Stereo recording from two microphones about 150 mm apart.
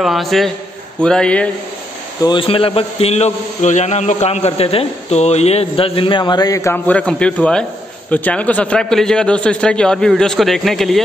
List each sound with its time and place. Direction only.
0.0 s a man's voice: centre (ahead or behind)
2.2 s a man's voice: 35° left (ahead or behind); by 11.0 s centre (ahead or behind)